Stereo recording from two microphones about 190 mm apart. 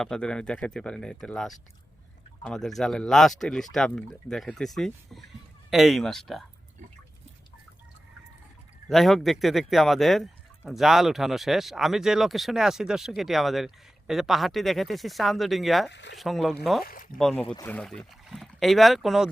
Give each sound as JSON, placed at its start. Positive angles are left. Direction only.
{"t": 0.0, "sound": "speech", "side_deg": 5}
{"t": 8.9, "sound": "speech", "side_deg": 0}
{"t": 15.9, "sound": "speech", "side_deg": 70}
{"t": 16.1, "sound": "speech", "side_deg": 0}
{"t": 16.8, "sound": "speech", "side_deg": 45}
{"t": 17.2, "sound": "speech", "side_deg": 5}